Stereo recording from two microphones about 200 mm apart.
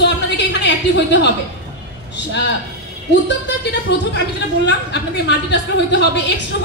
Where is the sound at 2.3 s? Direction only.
60° left (ahead or behind).